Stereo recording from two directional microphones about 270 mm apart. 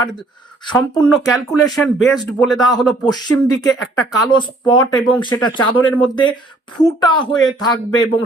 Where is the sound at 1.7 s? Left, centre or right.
Centre.